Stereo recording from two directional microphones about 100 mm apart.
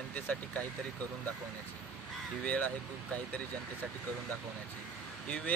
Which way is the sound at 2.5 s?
15° left (ahead or behind).